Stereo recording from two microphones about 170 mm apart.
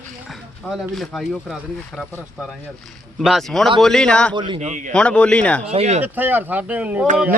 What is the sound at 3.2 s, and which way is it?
Speech, centre (ahead or behind).